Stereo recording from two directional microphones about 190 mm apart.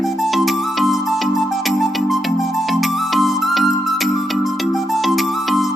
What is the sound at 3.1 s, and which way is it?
Music, centre (ahead or behind).